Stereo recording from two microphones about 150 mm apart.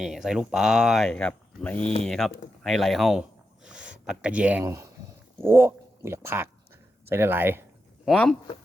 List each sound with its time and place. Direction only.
0.0 s speech: centre (ahead or behind)
4.6 s speech: 20° right (ahead or behind)
8.1 s speech: 10° left (ahead or behind)